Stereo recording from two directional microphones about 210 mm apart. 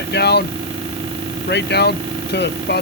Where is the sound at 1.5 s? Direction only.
55° left (ahead or behind).